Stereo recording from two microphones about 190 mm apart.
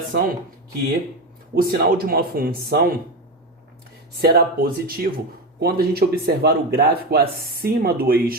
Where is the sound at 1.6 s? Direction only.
50° right (ahead or behind).